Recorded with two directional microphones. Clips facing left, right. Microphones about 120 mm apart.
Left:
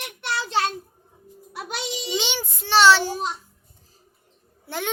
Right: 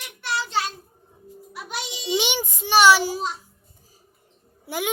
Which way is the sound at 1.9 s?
15° right (ahead or behind).